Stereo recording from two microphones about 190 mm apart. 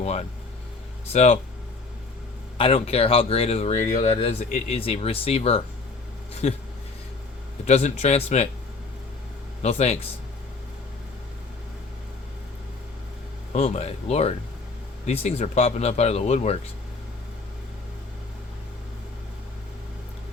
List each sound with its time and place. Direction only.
0.0 s speech: 35° left (ahead or behind)
2.6 s speech: 30° left (ahead or behind)
7.7 s speech: 35° left (ahead or behind)
9.6 s speech: 35° left (ahead or behind)
13.5 s speech: 35° left (ahead or behind)